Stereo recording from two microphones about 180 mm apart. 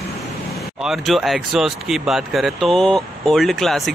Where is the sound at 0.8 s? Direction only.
Centre (ahead or behind).